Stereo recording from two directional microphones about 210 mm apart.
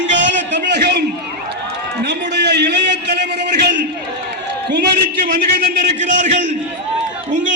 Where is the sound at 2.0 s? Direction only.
55° right (ahead or behind).